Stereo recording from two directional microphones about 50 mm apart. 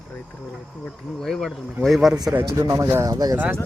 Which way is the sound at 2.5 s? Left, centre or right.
Right.